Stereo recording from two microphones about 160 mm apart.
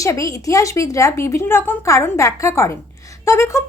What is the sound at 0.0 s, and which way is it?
Speech, 20° left (ahead or behind).